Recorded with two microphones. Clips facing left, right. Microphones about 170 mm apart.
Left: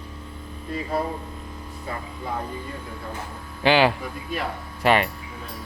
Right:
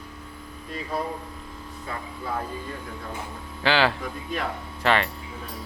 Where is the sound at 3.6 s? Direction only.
15° left (ahead or behind).